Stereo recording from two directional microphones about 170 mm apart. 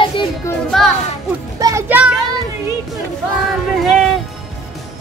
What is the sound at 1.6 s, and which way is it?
Music, 20° right (ahead or behind).